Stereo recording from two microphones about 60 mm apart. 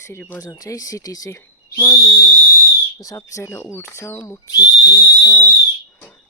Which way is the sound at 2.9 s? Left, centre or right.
Left.